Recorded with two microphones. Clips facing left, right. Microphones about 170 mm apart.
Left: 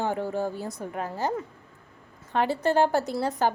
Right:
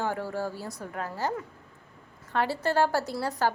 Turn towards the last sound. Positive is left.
turn(degrees=20)  # may be behind; listen again after turning